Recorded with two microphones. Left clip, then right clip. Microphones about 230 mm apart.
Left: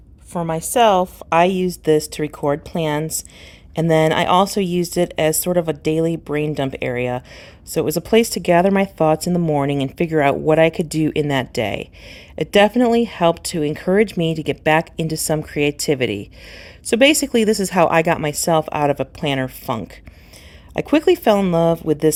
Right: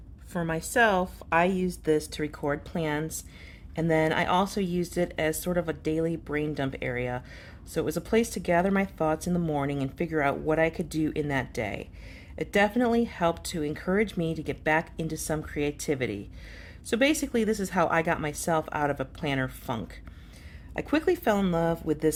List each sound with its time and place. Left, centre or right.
0.3 s a woman's voice: left
1.5 s speech: centre
2.2 s a woman's voice: left
4.6 s speech: centre
4.9 s a woman's voice: left
10.8 s speech: centre
11.0 s speech: left
16.0 s speech: centre
17.2 s speech: left